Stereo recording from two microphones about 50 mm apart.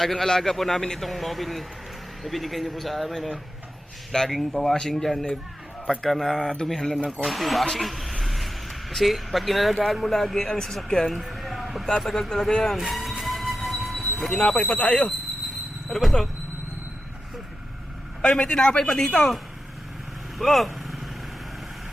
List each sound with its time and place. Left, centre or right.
0.0 s a man's voice: centre
11.1 s a sound: centre
11.9 s a man's voice: centre
12.9 s music: centre
14.2 s a man's voice: centre; by 15.1 s left
15.9 s speech: centre
18.2 s a man's voice: centre
20.4 s speech: centre